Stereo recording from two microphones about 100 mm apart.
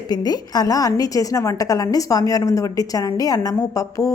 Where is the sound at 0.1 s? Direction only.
40° left (ahead or behind).